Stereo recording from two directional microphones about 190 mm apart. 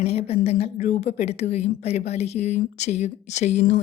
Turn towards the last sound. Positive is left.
turn(degrees=35)  # may be behind; listen again after turning